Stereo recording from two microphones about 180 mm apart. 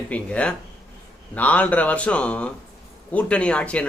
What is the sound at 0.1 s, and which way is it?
Speech, 5° left (ahead or behind).